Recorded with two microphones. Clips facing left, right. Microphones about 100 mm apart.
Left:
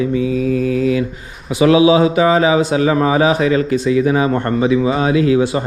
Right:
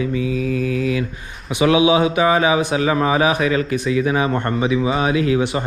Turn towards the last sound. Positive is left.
turn(degrees=30)  # may be behind; listen again after turning